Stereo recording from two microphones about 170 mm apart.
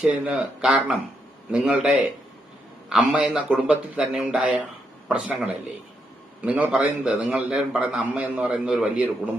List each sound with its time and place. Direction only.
0.0 s a man's voice: 5° right (ahead or behind)